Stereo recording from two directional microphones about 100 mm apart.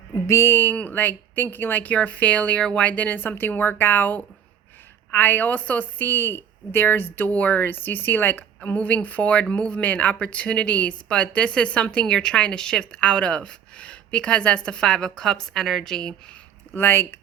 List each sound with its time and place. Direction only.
0.3 s a woman's voice: 25° left (ahead or behind); by 16.1 s 5° left (ahead or behind)
16.7 s speech: 20° left (ahead or behind)